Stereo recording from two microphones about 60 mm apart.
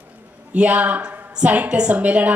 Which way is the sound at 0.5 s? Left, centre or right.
Right.